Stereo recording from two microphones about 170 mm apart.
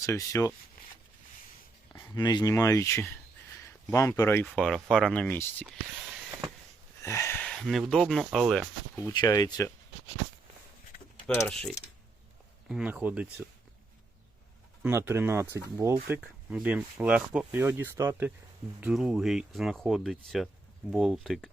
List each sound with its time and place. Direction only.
0.0 s speech: 20° left (ahead or behind)
1.9 s speech: 25° left (ahead or behind)
5.6 s a sound: centre (ahead or behind)
7.0 s a sound: 15° left (ahead or behind)
7.6 s speech: centre (ahead or behind)
9.0 s speech: 20° left (ahead or behind)
11.3 s speech: 10° left (ahead or behind)
12.6 s speech: 5° right (ahead or behind)
14.8 s speech: 15° right (ahead or behind)
18.8 s speech: 5° right (ahead or behind)